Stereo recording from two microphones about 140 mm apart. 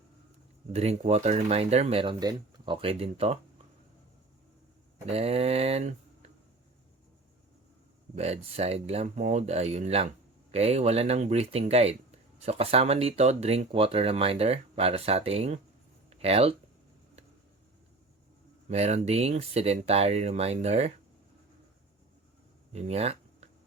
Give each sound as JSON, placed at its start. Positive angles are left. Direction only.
{"t": 0.7, "sound": "speech", "side_deg": -50}
{"t": 5.0, "sound": "speech", "side_deg": -45}
{"t": 8.1, "sound": "speech", "side_deg": -50}
{"t": 18.7, "sound": "speech", "side_deg": -50}
{"t": 22.7, "sound": "a sound", "side_deg": -50}